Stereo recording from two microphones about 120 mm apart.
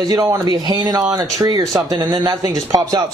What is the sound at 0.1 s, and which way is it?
A man's voice, 30° right (ahead or behind).